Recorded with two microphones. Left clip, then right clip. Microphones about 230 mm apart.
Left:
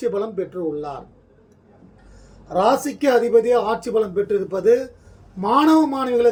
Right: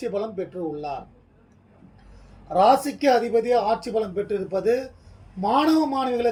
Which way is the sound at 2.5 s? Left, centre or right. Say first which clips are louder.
Even; centre.